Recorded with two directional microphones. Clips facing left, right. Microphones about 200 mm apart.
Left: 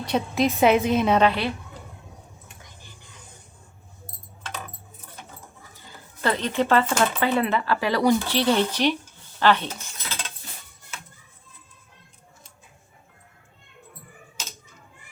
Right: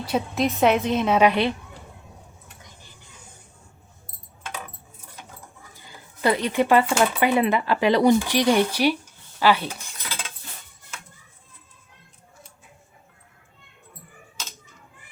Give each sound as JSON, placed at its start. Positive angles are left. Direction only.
{"t": 0.0, "sound": "a woman's voice", "side_deg": 0}
{"t": 1.2, "sound": "a woman's voice", "side_deg": -20}
{"t": 6.2, "sound": "speech", "side_deg": -15}
{"t": 9.4, "sound": "a sound", "side_deg": -10}